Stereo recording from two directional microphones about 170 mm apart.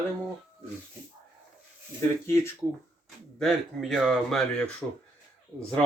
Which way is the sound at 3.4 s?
Centre (ahead or behind).